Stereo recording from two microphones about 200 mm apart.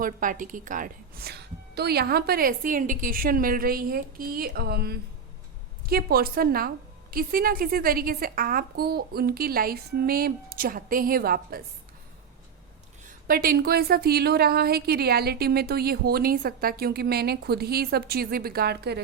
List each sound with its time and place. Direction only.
0.0 s a woman's voice: 40° right (ahead or behind)
13.1 s a woman's voice: 45° right (ahead or behind)